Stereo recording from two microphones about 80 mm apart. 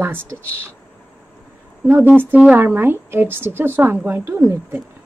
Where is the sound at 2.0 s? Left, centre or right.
Right.